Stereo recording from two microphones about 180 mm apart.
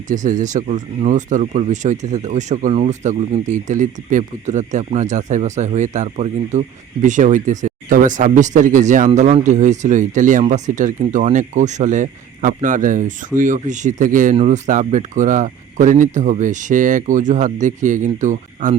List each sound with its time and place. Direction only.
0.1 s speech: 45° right (ahead or behind)